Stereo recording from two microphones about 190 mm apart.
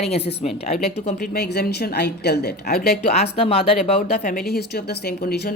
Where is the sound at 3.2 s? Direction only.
30° left (ahead or behind).